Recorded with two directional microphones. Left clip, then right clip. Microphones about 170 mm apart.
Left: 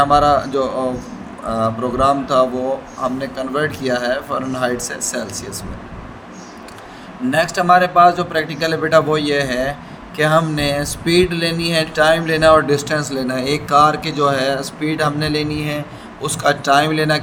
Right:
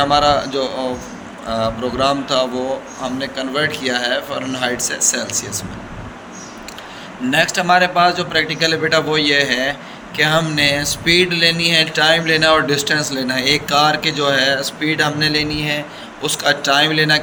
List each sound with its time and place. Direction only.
0.0 s a man's voice: 50° left (ahead or behind)
7.3 s a man's voice: 55° left (ahead or behind)